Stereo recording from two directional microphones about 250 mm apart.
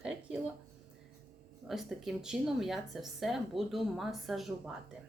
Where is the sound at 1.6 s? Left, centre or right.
Centre.